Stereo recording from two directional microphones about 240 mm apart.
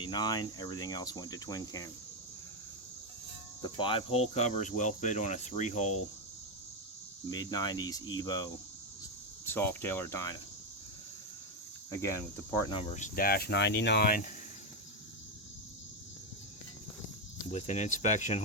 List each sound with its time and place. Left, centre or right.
0.0 s cricket: centre
3.6 s cricket: left
7.3 s cricket: centre
9.5 s cricket: centre
11.9 s speech: centre; by 14.3 s left
17.5 s speech: left